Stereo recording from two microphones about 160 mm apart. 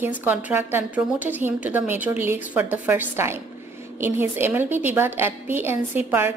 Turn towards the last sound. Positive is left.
turn(degrees=-15)  # may be behind; listen again after turning